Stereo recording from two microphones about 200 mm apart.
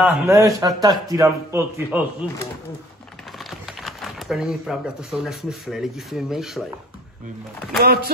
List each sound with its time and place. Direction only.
0.2 s a man's voice: 15° right (ahead or behind)
3.3 s speech: centre (ahead or behind)
7.7 s speech: 50° right (ahead or behind)